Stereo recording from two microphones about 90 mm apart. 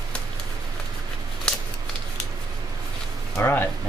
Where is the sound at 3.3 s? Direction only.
20° left (ahead or behind).